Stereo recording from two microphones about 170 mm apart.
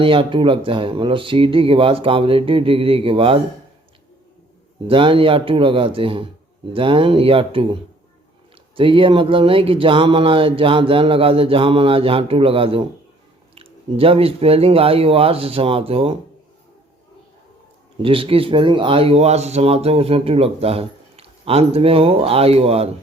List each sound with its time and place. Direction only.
0.0 s speech: 30° right (ahead or behind)
4.9 s speech: 30° right (ahead or behind)
18.0 s speech: 30° right (ahead or behind)